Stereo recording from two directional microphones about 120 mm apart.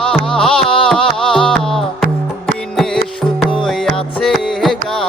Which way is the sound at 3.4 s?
Centre (ahead or behind).